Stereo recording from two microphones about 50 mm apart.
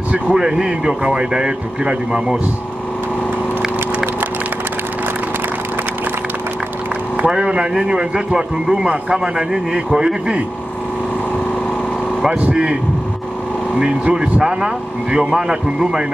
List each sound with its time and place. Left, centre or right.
0.1 s speech: centre
7.2 s speech: centre
12.2 s speech: centre
13.7 s speech: centre